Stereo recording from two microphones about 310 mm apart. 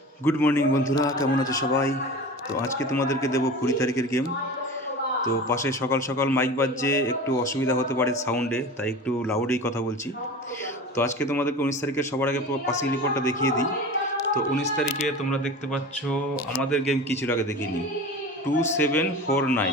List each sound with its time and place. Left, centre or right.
0.3 s a man's voice: centre
2.9 s a man's voice: centre
5.2 s a man's voice: centre
10.9 s a man's voice: centre
18.8 s a man's voice: centre